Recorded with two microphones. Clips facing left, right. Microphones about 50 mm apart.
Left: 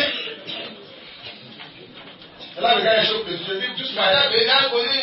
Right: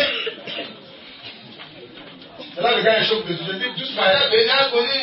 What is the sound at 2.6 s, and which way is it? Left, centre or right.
A man's voice, centre.